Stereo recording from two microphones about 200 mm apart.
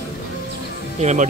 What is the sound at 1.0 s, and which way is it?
Speech, 35° right (ahead or behind).